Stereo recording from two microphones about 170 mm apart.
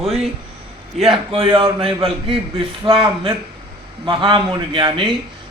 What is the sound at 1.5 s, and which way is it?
A man's voice, 30° right (ahead or behind).